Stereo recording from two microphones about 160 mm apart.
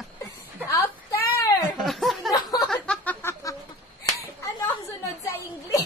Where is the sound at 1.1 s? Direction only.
20° left (ahead or behind).